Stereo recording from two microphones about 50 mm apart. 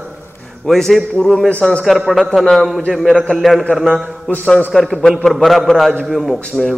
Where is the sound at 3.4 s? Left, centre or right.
Centre.